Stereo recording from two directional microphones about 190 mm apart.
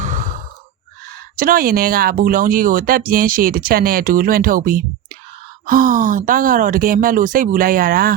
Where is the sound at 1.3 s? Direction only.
50° right (ahead or behind).